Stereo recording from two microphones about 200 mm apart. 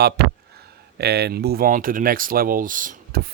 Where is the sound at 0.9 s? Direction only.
55° right (ahead or behind).